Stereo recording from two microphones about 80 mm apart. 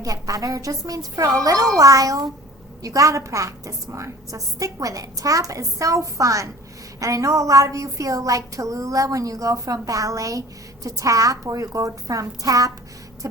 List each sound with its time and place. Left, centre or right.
0.0 s a woman's voice: right